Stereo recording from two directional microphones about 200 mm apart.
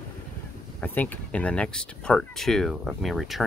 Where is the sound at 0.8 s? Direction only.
10° left (ahead or behind).